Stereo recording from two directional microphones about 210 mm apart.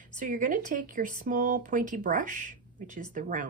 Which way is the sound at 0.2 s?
40° right (ahead or behind).